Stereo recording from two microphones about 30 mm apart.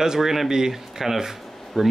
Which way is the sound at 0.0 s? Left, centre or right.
Centre.